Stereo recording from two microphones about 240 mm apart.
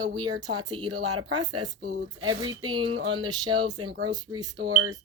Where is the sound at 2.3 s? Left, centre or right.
Centre.